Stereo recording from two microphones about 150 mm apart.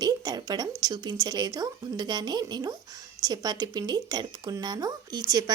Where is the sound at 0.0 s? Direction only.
25° right (ahead or behind).